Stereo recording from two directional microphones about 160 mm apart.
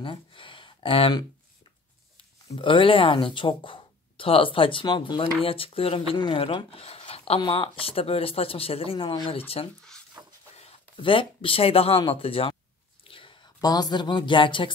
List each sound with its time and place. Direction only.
0.0 s speech: 30° left (ahead or behind)
2.5 s speech: 35° left (ahead or behind)
10.5 s speech: 40° left (ahead or behind)